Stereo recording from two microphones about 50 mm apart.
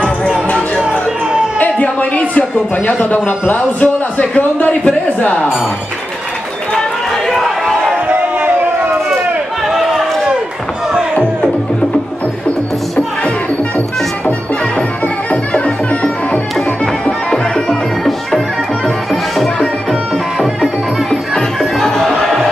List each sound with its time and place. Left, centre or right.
1.6 s a sound: left
2.9 s a man's voice: left
7.2 s run: centre
8.1 s crowd: right
9.7 s a sound: centre
15.5 s music: left
17.3 s music: centre
21.1 s music: centre